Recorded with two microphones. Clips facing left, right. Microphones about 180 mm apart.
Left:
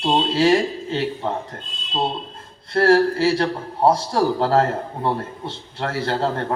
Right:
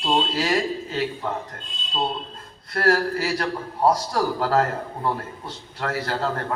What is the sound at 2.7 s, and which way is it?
A man's voice, 30° left (ahead or behind).